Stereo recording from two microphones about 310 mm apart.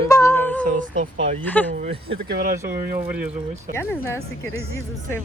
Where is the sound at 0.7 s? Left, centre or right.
Right.